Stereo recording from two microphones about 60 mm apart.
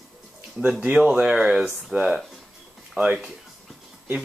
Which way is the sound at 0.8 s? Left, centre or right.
Centre.